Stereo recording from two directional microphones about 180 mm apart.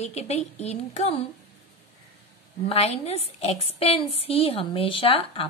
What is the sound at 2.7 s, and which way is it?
A woman's voice, 35° left (ahead or behind).